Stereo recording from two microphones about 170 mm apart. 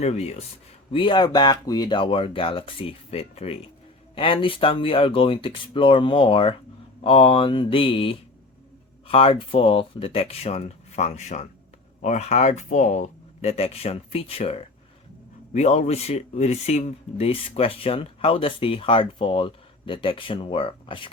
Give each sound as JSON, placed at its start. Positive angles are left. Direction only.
{"t": 0.0, "sound": "speech", "side_deg": 40}